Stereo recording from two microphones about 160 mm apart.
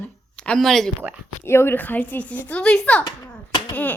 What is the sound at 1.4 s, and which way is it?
Speech, 15° left (ahead or behind).